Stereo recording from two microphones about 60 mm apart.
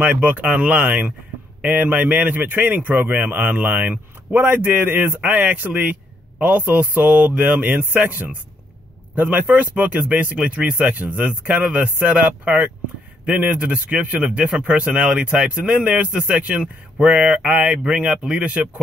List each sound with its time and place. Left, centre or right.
0.0 s a man's voice: right